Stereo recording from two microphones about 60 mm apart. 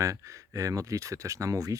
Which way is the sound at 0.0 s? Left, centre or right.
Right.